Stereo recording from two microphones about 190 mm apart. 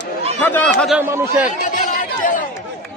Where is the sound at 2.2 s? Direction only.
45° left (ahead or behind).